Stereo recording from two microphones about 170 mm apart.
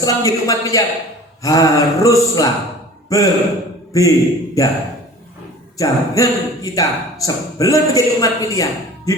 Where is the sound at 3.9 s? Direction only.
20° left (ahead or behind).